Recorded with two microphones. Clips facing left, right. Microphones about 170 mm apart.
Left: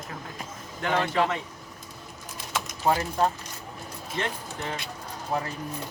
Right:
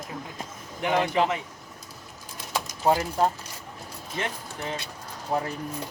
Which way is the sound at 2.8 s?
15° right (ahead or behind).